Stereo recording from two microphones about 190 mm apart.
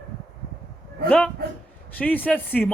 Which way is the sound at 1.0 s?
5° left (ahead or behind).